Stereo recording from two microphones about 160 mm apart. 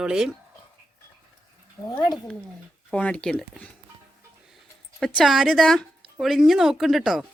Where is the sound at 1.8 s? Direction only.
20° left (ahead or behind).